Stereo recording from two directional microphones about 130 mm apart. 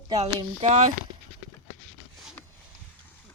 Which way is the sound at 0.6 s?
55° right (ahead or behind).